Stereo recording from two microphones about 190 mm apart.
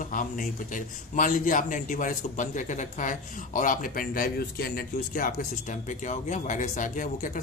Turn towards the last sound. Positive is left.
turn(degrees=45)  # may be behind; listen again after turning